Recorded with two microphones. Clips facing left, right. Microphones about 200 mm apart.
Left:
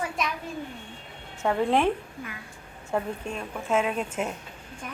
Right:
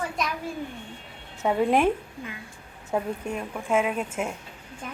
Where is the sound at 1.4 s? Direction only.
10° right (ahead or behind).